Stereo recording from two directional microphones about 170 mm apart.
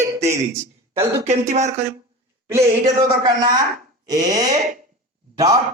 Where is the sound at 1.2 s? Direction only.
40° right (ahead or behind).